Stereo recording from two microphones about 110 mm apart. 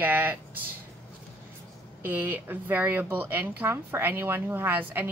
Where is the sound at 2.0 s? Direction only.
15° right (ahead or behind).